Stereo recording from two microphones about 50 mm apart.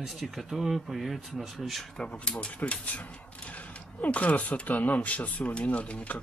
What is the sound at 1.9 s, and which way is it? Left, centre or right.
Speech, left.